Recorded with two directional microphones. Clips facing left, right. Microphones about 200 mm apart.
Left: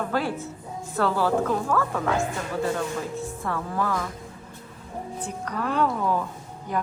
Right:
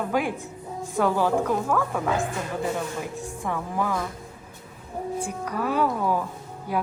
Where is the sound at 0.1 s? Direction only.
15° right (ahead or behind).